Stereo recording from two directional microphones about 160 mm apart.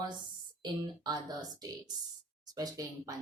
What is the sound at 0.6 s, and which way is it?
A woman's voice, 25° right (ahead or behind).